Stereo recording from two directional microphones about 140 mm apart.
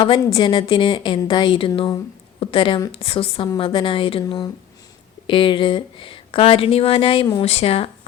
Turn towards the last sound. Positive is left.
turn(degrees=45)  # may be behind; listen again after turning